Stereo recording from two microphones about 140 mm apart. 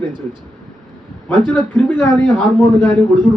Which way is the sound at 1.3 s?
35° right (ahead or behind).